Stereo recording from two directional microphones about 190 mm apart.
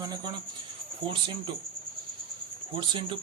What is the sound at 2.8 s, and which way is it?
Speech, 25° right (ahead or behind).